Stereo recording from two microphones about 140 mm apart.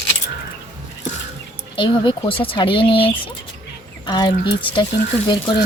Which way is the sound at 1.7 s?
35° left (ahead or behind).